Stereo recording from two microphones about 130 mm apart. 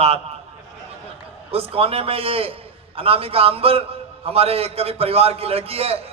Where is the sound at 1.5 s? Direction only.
45° right (ahead or behind).